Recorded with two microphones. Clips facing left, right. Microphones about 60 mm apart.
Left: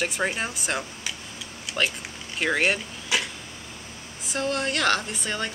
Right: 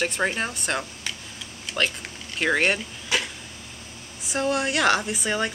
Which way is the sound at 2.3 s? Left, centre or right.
Centre.